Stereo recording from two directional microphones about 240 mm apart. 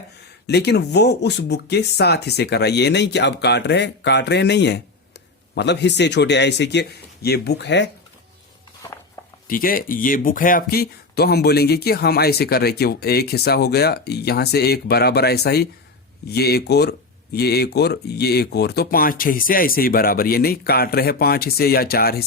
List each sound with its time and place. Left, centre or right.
0.4 s speech: left
9.5 s speech: left